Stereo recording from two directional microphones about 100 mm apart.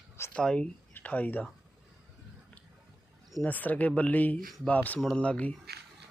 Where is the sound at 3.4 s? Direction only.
15° left (ahead or behind).